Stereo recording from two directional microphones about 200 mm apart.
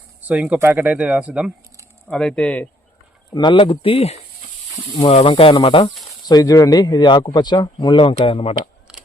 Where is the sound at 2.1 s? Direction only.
5° left (ahead or behind).